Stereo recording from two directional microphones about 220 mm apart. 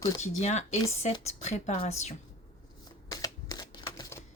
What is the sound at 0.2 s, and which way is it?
A woman's voice, 30° left (ahead or behind).